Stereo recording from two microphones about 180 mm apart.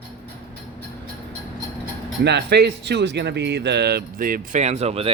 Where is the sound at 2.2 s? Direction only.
65° right (ahead or behind); by 4.6 s 50° right (ahead or behind).